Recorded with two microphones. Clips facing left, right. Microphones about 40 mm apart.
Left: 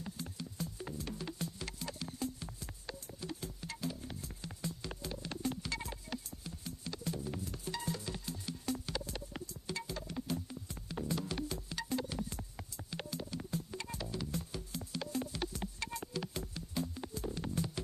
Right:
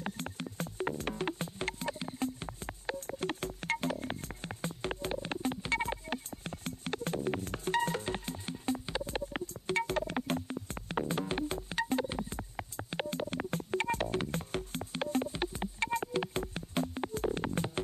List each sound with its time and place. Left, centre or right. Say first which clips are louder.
0.0 s music: right 6 dB; right